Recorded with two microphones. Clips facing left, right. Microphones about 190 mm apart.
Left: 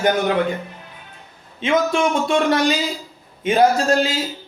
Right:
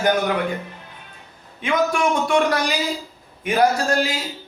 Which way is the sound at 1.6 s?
25° left (ahead or behind).